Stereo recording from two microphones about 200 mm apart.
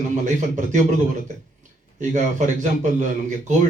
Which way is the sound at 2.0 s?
35° right (ahead or behind).